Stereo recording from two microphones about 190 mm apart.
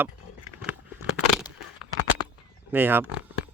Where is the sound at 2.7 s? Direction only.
10° right (ahead or behind).